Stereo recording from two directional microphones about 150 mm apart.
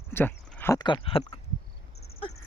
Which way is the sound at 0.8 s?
30° left (ahead or behind).